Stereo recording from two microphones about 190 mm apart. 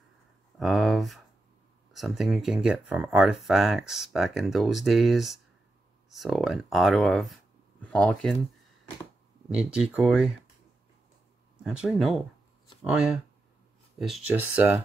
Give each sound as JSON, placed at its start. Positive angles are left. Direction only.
{"t": 0.6, "sound": "speech", "side_deg": 0}
{"t": 9.5, "sound": "speech", "side_deg": -5}
{"t": 11.6, "sound": "speech", "side_deg": -5}